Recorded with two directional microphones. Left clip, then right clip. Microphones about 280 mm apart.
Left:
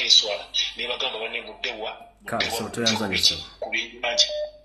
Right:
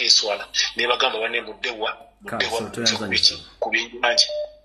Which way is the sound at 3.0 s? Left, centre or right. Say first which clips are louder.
Right 2 dB; right.